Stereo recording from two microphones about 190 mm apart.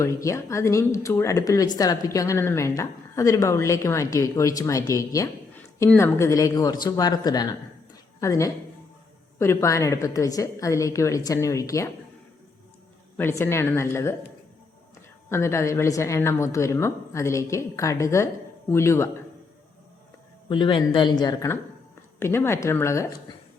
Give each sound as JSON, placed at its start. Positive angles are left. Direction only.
{"t": 0.0, "sound": "speech", "side_deg": 15}
{"t": 13.1, "sound": "speech", "side_deg": 10}
{"t": 15.3, "sound": "speech", "side_deg": 15}
{"t": 20.5, "sound": "speech", "side_deg": 25}